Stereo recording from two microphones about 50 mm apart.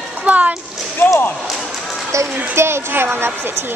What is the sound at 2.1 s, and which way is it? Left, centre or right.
Speech, right.